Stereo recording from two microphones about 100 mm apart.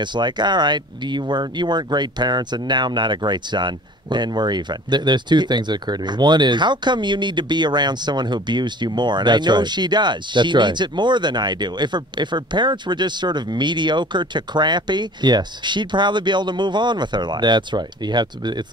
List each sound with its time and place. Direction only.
0.0 s speech: 50° right (ahead or behind)